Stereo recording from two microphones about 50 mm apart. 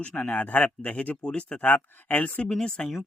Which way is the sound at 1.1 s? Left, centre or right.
Centre.